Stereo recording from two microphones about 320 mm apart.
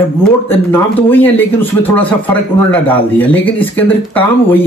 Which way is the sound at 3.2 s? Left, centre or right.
Centre.